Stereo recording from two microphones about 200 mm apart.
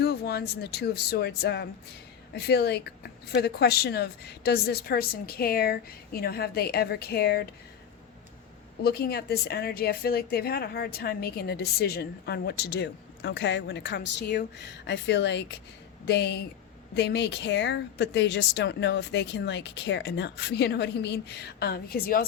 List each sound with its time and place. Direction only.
0.0 s a woman's voice: 55° left (ahead or behind)
8.8 s a woman's voice: 50° left (ahead or behind)